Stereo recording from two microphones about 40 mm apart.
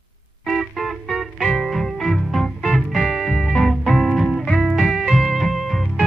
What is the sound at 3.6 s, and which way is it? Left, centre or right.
Music, centre.